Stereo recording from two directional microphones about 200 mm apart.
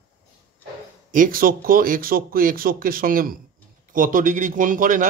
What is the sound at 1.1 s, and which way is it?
Speech, 45° right (ahead or behind).